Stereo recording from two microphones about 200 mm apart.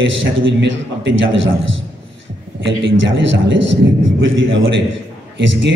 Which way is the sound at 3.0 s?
65° right (ahead or behind).